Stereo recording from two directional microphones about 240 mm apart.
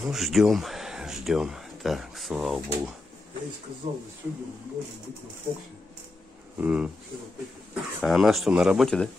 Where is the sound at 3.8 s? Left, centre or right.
Right.